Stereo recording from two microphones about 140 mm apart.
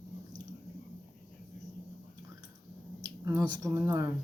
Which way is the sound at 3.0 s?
25° right (ahead or behind).